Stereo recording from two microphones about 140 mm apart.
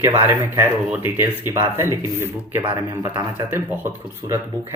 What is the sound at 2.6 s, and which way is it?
Speech, 30° right (ahead or behind).